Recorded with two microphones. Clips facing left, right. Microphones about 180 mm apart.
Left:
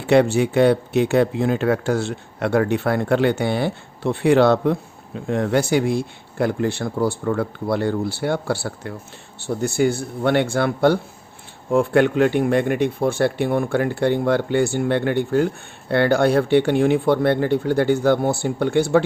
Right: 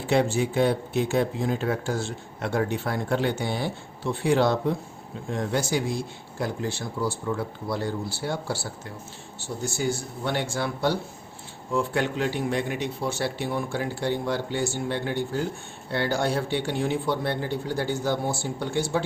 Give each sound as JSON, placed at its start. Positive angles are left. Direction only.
{"t": 0.1, "sound": "speech", "side_deg": 65}